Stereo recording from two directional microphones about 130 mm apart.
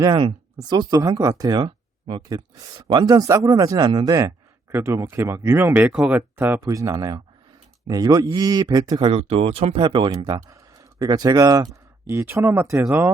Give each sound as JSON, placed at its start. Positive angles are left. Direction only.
{"t": 0.2, "sound": "a man's voice", "side_deg": -35}
{"t": 9.0, "sound": "speech", "side_deg": -50}